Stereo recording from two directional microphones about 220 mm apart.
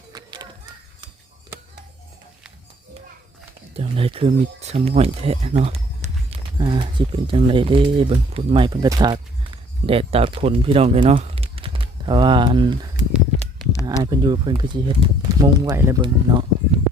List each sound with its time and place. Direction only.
0.1 s music: 20° right (ahead or behind)
3.8 s speech: 25° right (ahead or behind)